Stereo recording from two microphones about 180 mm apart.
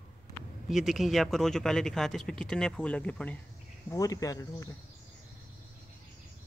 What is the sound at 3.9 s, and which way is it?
Speech, 20° left (ahead or behind).